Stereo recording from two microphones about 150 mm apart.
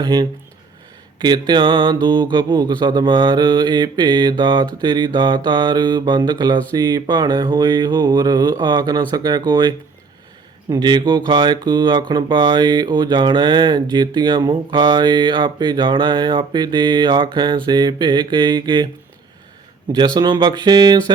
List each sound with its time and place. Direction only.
0.0 s mantra: 30° right (ahead or behind)
20.1 s mantra: 30° right (ahead or behind)